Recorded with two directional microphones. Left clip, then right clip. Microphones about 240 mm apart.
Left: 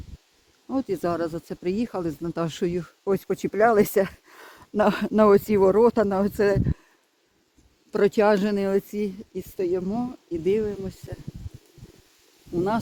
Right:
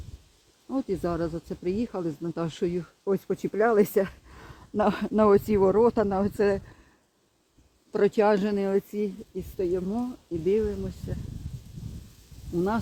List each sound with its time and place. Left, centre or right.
0.7 s speech: left
7.9 s speech: left